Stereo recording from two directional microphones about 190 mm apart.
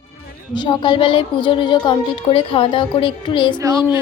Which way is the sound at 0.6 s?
25° left (ahead or behind).